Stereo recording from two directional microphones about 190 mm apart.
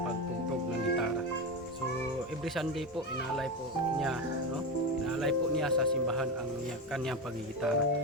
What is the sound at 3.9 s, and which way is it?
Speech, centre (ahead or behind).